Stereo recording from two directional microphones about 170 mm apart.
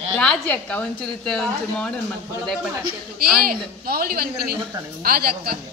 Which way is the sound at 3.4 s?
60° right (ahead or behind).